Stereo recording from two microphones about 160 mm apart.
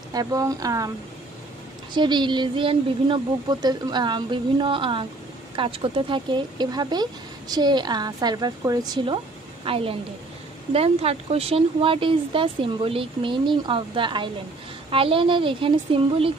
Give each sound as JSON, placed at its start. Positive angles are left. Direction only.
{"t": 0.1, "sound": "speech", "side_deg": -25}
{"t": 2.0, "sound": "speech", "side_deg": -30}